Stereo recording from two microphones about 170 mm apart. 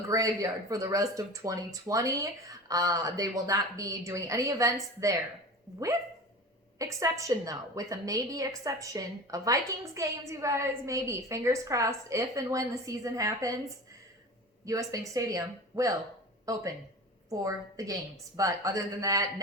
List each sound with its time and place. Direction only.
0.1 s a woman's voice: 20° right (ahead or behind)
6.7 s a woman's voice: 20° right (ahead or behind)
14.6 s a woman's voice: 20° right (ahead or behind)